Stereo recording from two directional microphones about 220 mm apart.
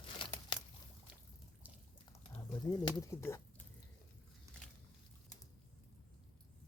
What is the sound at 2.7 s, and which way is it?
Speech, 20° left (ahead or behind).